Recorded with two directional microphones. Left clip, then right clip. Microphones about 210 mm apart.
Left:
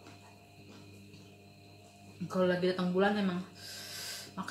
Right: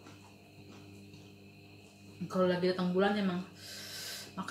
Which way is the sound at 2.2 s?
Centre (ahead or behind).